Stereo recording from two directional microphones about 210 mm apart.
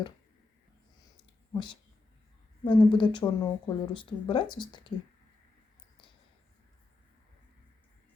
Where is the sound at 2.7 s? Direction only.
20° left (ahead or behind).